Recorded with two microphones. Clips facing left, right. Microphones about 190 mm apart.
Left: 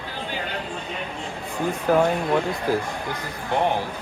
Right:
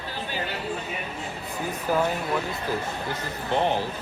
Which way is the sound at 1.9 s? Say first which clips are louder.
Left 5 dB; 55° left (ahead or behind).